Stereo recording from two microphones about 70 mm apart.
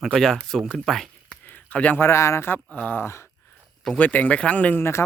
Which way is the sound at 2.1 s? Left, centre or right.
Left.